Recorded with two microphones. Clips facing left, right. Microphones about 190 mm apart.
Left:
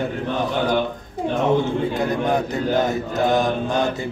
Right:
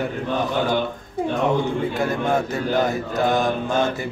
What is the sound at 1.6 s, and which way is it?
A man's voice, 20° left (ahead or behind).